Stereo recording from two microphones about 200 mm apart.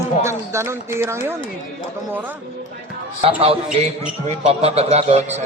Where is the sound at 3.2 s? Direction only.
30° right (ahead or behind).